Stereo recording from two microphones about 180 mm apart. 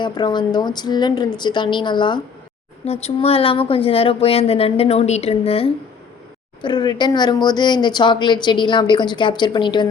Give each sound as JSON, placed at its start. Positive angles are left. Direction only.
{"t": 0.0, "sound": "speech", "side_deg": 25}